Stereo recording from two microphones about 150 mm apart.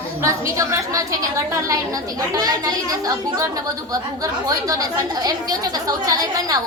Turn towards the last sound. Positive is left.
turn(degrees=-25)  # may be behind; listen again after turning